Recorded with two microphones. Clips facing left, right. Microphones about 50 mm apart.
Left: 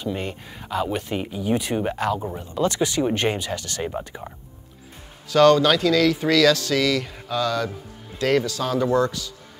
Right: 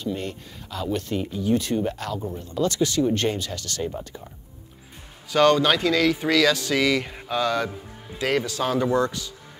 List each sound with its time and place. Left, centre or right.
0.0 s speech: centre
5.3 s speech: centre